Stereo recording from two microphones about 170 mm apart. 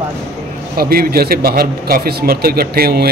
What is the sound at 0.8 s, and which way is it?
A man's voice, 65° right (ahead or behind).